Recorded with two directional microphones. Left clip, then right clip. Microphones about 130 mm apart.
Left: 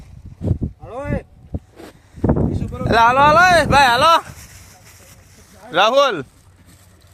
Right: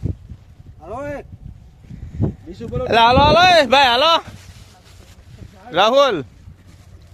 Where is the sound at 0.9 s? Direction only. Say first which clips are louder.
Even; 55° right (ahead or behind).